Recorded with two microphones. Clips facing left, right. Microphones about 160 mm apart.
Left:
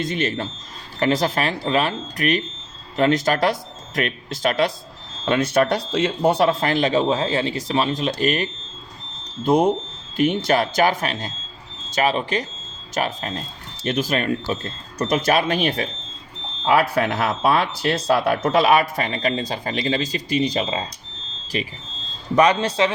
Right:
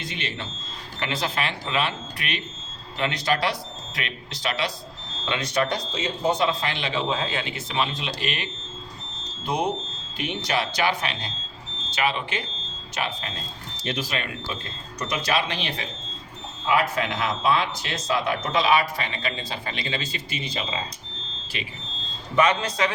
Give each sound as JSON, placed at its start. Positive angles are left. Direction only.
{"t": 0.0, "sound": "speech", "side_deg": 45}
{"t": 16.6, "sound": "speech", "side_deg": 60}